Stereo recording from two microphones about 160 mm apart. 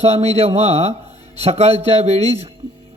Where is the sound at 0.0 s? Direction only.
40° right (ahead or behind).